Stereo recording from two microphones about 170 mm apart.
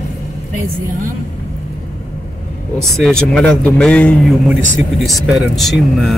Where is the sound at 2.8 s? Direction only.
5° left (ahead or behind).